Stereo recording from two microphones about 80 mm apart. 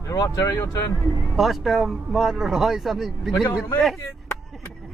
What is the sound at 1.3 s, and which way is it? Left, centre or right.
Speech, centre.